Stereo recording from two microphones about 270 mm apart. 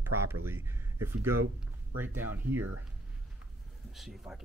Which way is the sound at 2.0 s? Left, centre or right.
Centre.